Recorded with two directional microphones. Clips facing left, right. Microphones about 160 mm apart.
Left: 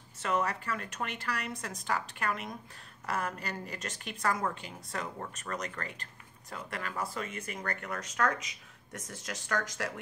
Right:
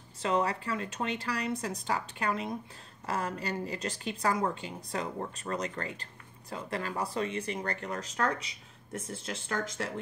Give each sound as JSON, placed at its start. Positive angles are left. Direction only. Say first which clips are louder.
{"t": 0.2, "sound": "speech", "louder": "right 3 dB", "side_deg": -30}